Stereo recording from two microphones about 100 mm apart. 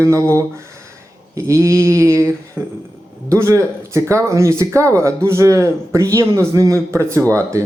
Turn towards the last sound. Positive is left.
turn(degrees=-30)  # may be behind; listen again after turning